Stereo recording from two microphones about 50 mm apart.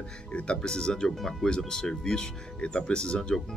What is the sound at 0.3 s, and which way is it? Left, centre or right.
Speech, left.